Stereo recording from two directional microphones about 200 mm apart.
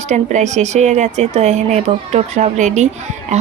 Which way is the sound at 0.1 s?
35° right (ahead or behind).